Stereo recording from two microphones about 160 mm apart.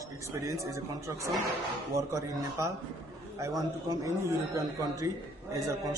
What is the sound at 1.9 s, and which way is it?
Speech, 20° right (ahead or behind).